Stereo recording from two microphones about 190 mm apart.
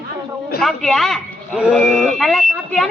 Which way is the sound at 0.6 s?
Centre (ahead or behind).